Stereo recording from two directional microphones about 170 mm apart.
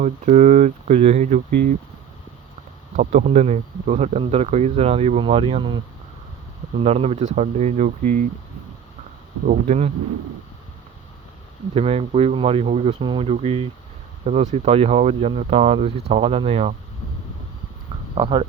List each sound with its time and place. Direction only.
0.0 s speech: 45° right (ahead or behind)
2.9 s speech: 50° right (ahead or behind); by 5.8 s 30° right (ahead or behind)
6.8 s speech: 35° right (ahead or behind)
9.5 s speech: 45° right (ahead or behind)
11.7 s speech: 35° right (ahead or behind)
18.1 s speech: 30° right (ahead or behind)